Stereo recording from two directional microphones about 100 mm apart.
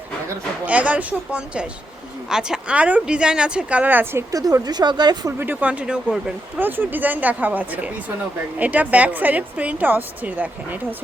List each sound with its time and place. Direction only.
0.6 s a woman's voice: 15° right (ahead or behind)
4.3 s speech: 35° right (ahead or behind)
5.4 s a woman's voice: 15° right (ahead or behind)
6.6 s a woman's voice: 20° right (ahead or behind)